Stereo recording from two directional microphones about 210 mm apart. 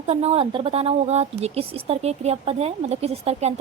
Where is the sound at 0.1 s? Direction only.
30° right (ahead or behind).